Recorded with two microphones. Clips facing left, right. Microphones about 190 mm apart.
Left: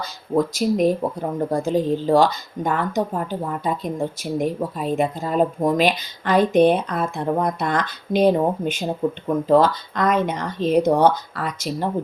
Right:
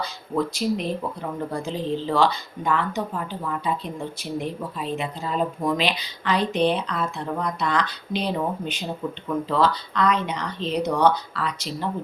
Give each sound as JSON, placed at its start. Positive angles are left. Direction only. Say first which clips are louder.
{"t": 0.0, "sound": "speech", "louder": "left 4 dB", "side_deg": 45}